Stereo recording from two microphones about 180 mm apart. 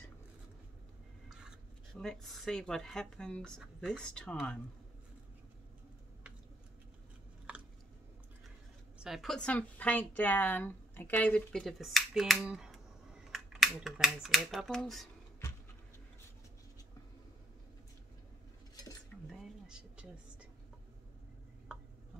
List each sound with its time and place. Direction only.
2.0 s speech: centre (ahead or behind)
9.0 s a woman's voice: centre (ahead or behind)
19.2 s a sound: 5° right (ahead or behind)